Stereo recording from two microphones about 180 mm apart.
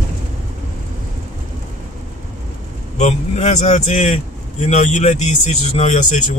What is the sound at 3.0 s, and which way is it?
Speech, 40° left (ahead or behind).